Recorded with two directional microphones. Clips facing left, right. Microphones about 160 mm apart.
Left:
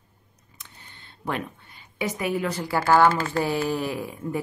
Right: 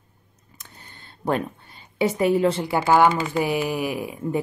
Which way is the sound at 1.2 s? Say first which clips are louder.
Right 6 dB; 35° right (ahead or behind).